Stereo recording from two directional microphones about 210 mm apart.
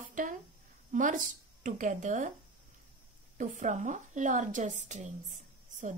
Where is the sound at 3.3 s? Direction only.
35° right (ahead or behind).